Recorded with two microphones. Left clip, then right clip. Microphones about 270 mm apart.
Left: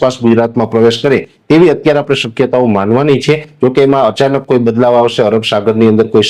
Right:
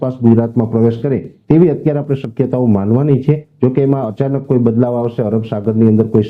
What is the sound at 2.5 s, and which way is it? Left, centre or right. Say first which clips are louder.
Speech: left 5 dB; left.